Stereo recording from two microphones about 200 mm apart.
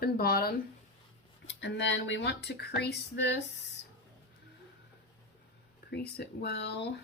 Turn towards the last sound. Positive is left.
turn(degrees=55)  # may be behind; listen again after turning